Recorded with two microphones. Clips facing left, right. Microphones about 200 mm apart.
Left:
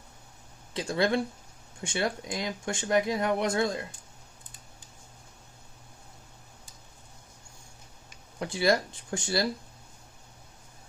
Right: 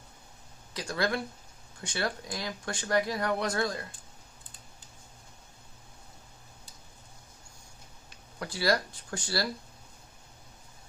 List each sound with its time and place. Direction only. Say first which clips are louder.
0.7 s speech: left 4 dB; 25° left (ahead or behind)
8.4 s speech: left 3 dB; 20° left (ahead or behind)